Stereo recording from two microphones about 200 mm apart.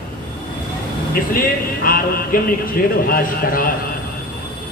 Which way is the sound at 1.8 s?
45° left (ahead or behind).